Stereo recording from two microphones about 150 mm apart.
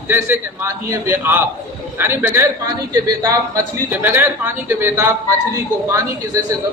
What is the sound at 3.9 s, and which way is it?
A man's voice, 15° right (ahead or behind).